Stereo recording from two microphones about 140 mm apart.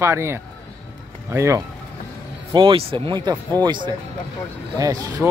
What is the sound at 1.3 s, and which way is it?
Speech, 20° right (ahead or behind).